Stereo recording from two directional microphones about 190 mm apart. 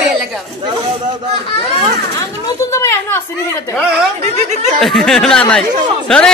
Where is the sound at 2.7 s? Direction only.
15° left (ahead or behind).